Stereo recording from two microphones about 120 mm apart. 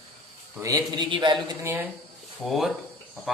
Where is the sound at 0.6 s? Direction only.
35° right (ahead or behind).